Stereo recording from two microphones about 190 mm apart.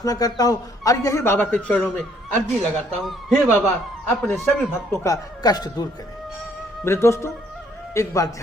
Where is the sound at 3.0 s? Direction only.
Centre (ahead or behind).